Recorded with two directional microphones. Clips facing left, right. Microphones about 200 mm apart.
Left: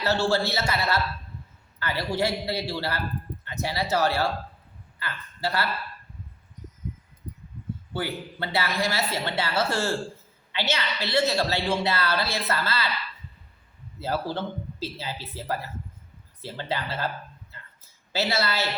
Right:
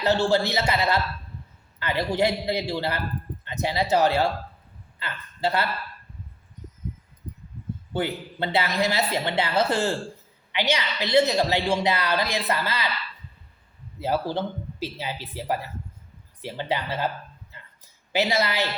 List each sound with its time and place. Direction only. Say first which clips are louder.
0.0 s a woman's voice: right 3 dB; 15° right (ahead or behind)
7.9 s a woman's voice: right 4 dB; 20° right (ahead or behind)
14.0 s a woman's voice: right 3 dB; 15° right (ahead or behind)
18.1 s a woman's voice: right 3 dB; 15° right (ahead or behind)